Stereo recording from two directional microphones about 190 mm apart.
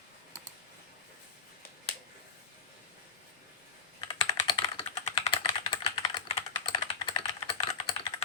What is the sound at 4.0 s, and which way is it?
Computer keyboard, 20° left (ahead or behind).